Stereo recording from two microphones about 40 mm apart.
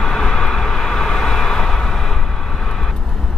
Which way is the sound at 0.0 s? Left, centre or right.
Centre.